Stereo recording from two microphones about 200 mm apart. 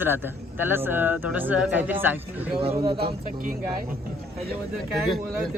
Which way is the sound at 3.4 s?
45° right (ahead or behind).